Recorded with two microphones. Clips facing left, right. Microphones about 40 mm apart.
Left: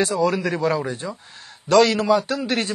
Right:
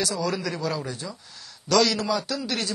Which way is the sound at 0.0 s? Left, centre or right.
Left.